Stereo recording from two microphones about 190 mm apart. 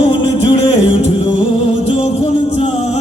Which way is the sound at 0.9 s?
30° left (ahead or behind).